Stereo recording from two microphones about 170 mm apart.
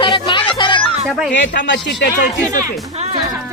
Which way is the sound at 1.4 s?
90° left.